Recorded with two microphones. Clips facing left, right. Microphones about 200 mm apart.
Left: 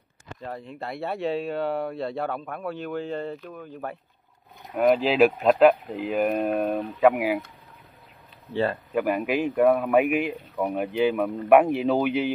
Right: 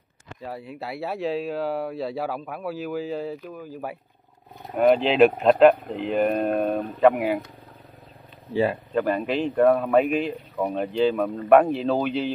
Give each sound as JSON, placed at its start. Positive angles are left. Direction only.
{"t": 0.7, "sound": "speech", "side_deg": -5}
{"t": 8.9, "sound": "speech", "side_deg": 10}